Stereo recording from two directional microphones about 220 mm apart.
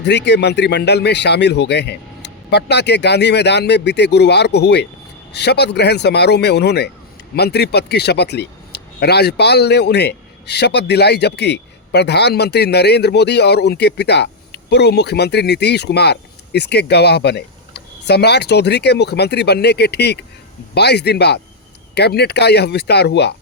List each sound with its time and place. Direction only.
0.0 s a man's voice: 50° left (ahead or behind)